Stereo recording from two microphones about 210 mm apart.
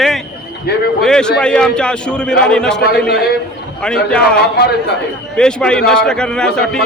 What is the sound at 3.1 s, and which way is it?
Speech, 50° left (ahead or behind).